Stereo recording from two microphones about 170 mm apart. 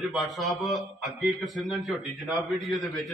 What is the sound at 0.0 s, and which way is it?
A man's voice, centre (ahead or behind).